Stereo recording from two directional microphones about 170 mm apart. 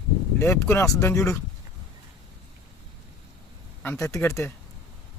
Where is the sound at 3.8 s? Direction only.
15° left (ahead or behind).